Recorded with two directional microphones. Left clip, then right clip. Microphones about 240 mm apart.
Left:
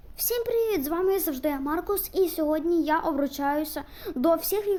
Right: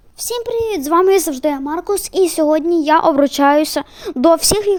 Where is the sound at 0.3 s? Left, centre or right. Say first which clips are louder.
Right 6 dB; centre.